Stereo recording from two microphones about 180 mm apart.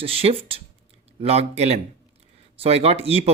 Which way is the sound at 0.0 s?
30° right (ahead or behind).